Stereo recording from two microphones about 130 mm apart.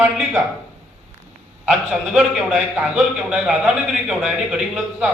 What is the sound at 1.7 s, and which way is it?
A man's voice, centre (ahead or behind).